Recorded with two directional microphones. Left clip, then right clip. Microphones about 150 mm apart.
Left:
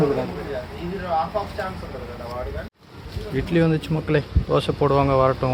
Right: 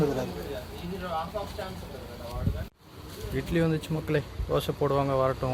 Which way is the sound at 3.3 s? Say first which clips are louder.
Left 7 dB; 5° left (ahead or behind).